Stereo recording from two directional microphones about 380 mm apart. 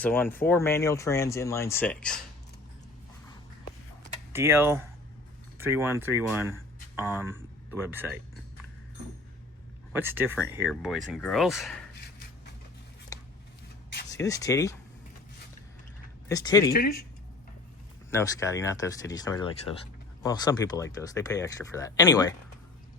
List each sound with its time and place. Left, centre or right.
0.0 s speech: centre
4.3 s speech: centre
9.9 s speech: centre
13.1 s a sound: centre
14.1 s speech: centre
16.3 s speech: centre
16.7 s speech: left
18.1 s speech: centre